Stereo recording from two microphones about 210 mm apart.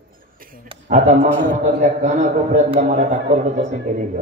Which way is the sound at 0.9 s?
35° right (ahead or behind).